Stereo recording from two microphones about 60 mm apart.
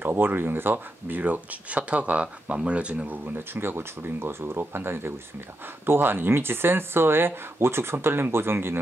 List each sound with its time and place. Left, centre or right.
0.0 s speech: right; by 3.2 s centre
3.3 s speech: right